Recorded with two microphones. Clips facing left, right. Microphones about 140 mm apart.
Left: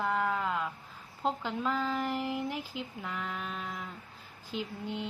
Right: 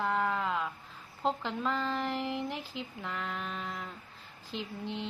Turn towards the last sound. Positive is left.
turn(degrees=5)  # may be behind; listen again after turning